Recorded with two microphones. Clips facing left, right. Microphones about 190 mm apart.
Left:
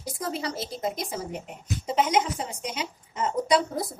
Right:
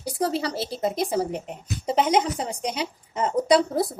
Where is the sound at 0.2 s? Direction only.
35° right (ahead or behind).